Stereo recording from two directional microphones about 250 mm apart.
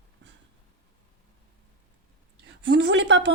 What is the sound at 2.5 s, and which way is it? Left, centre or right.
Speech, right.